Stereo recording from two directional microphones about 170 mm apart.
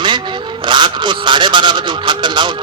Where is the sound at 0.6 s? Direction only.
25° right (ahead or behind).